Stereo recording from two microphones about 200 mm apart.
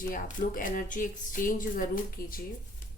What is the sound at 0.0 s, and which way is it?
Speech, 40° left (ahead or behind).